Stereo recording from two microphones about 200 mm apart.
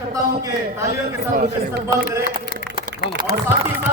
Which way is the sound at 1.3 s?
45° right (ahead or behind).